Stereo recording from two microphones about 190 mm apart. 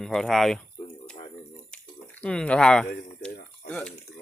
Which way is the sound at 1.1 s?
30° left (ahead or behind).